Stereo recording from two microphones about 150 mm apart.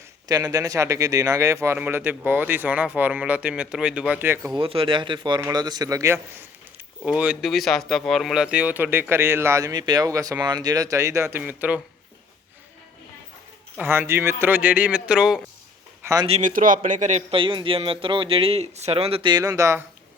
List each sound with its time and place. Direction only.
0.3 s speech: 25° right (ahead or behind)
4.5 s speech: 35° right (ahead or behind); by 6.1 s 20° right (ahead or behind)
7.0 s speech: 5° right (ahead or behind)
13.9 s speech: 15° right (ahead or behind)
16.4 s speech: 65° right (ahead or behind)
17.3 s speech: 35° right (ahead or behind)
19.5 s speech: 20° right (ahead or behind)